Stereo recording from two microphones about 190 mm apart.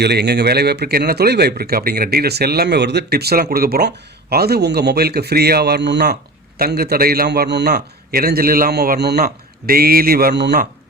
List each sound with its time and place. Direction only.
0.0 s speech: 60° right (ahead or behind)